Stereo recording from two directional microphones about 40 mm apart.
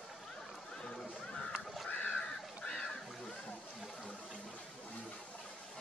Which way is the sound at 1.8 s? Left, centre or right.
Left.